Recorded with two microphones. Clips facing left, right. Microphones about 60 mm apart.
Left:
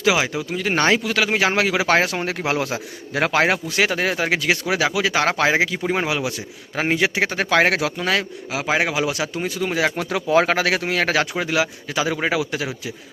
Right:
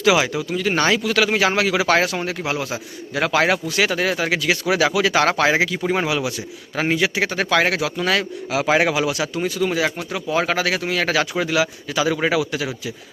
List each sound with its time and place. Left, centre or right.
0.0 s a man's voice: centre
0.5 s speech: left
2.2 s speech: left
3.4 s speech: left
5.0 s a man's voice: centre
6.1 s speech: left
7.7 s speech: left
7.9 s a man's voice: centre
9.0 s speech: left
10.0 s speech: left; by 12.5 s centre